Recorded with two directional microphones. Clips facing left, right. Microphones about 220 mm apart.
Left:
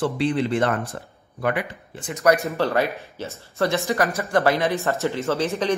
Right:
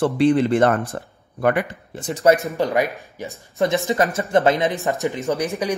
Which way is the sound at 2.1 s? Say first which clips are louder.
Right 3 dB; 30° right (ahead or behind).